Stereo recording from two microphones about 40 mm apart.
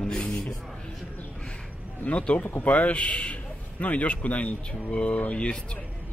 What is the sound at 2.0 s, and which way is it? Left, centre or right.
A man's voice, left.